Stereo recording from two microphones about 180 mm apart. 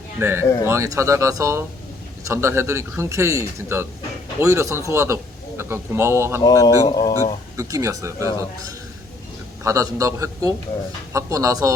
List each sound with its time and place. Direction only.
0.2 s a man's voice: 15° right (ahead or behind)
0.4 s speech: 15° left (ahead or behind)
0.7 s a man's voice: 15° right (ahead or behind)
6.4 s speech: 20° left (ahead or behind)
7.5 s a man's voice: 15° right (ahead or behind)
9.6 s a man's voice: 20° right (ahead or behind)